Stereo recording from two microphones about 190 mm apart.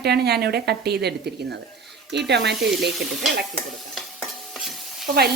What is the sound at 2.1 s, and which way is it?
Speech, 65° right (ahead or behind).